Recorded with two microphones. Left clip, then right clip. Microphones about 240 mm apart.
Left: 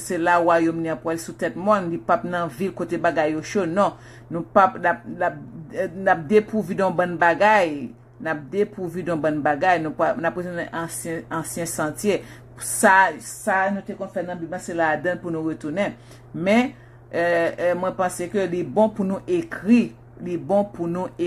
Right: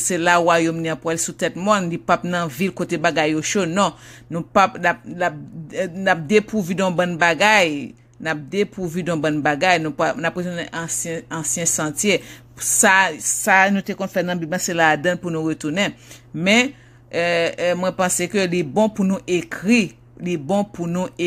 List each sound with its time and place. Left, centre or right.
0.1 s speech: right
8.9 s speech: right
17.1 s speech: right